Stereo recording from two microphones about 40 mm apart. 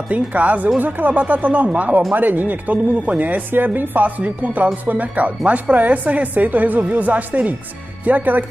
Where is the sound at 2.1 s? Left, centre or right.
Right.